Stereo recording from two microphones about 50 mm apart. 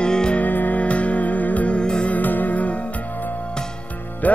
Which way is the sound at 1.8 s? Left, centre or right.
Centre.